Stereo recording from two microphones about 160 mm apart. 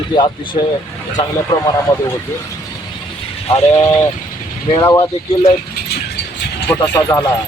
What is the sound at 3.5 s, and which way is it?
Speech, 40° left (ahead or behind).